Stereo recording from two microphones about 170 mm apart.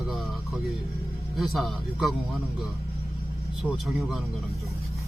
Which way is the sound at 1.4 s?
Centre (ahead or behind).